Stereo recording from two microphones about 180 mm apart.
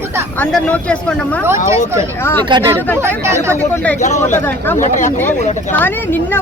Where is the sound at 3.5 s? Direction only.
10° left (ahead or behind).